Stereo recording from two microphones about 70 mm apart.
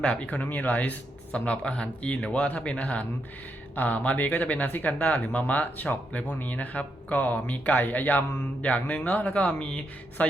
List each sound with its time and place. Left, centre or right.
0.0 s speech: centre